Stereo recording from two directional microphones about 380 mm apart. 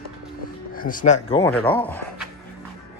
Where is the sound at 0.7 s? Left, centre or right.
Left; by 2.2 s centre.